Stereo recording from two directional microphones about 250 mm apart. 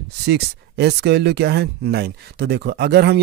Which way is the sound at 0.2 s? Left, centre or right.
Right.